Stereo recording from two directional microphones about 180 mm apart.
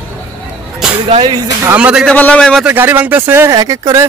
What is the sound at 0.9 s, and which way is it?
Speech, 25° right (ahead or behind).